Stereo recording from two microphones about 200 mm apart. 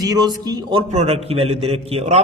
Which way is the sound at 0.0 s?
20° right (ahead or behind).